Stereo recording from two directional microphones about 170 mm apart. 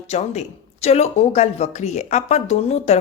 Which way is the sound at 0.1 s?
40° left (ahead or behind).